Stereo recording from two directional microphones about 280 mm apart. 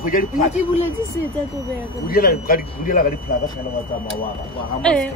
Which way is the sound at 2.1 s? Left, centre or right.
Left.